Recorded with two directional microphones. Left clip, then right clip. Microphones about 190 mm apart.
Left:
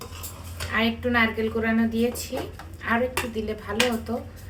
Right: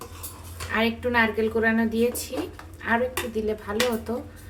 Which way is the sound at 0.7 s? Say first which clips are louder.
Even; 45° right (ahead or behind).